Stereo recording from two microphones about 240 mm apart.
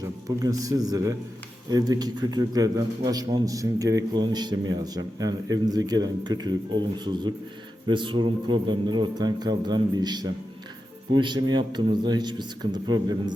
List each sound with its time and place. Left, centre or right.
0.0 s a man's voice: centre